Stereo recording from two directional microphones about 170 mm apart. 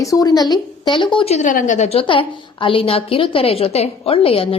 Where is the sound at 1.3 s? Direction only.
50° left (ahead or behind).